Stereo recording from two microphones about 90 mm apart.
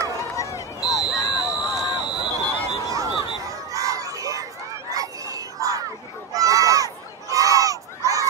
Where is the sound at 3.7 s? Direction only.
40° right (ahead or behind).